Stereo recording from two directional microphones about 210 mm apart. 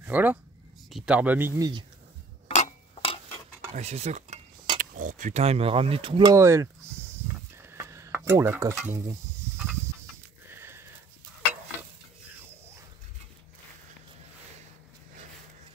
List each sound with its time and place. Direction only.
0.0 s speech: 10° right (ahead or behind)
2.4 s cutlery: 30° left (ahead or behind)
3.7 s cutlery: 30° right (ahead or behind)
6.3 s speech: 15° right (ahead or behind)
7.5 s stir: 10° right (ahead or behind)
10.5 s sniff: 10° right (ahead or behind)